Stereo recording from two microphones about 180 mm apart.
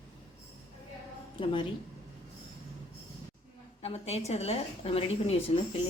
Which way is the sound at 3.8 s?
35° left (ahead or behind).